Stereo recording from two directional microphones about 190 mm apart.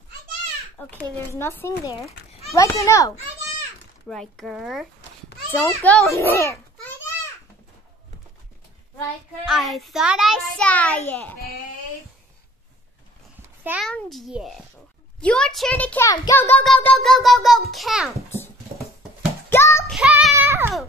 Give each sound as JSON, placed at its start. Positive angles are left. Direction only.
{"t": 0.8, "sound": "a child's voice", "side_deg": 10}
{"t": 4.1, "sound": "child singing", "side_deg": 0}
{"t": 5.5, "sound": "a child's voice", "side_deg": 15}
{"t": 9.5, "sound": "child singing", "side_deg": 0}
{"t": 13.7, "sound": "child singing", "side_deg": -5}
{"t": 19.5, "sound": "child singing", "side_deg": 15}
{"t": 19.9, "sound": "music", "side_deg": 0}